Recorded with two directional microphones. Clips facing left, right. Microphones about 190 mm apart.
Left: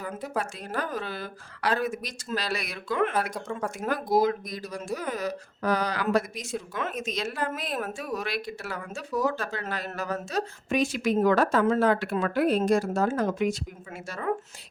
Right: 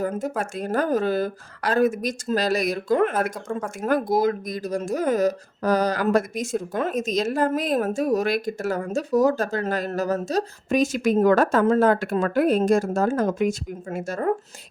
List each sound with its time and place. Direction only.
0.0 s speech: 45° right (ahead or behind)